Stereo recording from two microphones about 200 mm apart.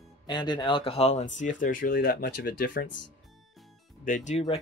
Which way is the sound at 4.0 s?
40° left (ahead or behind).